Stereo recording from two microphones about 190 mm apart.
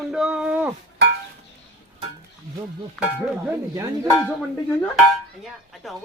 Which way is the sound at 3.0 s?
Centre (ahead or behind).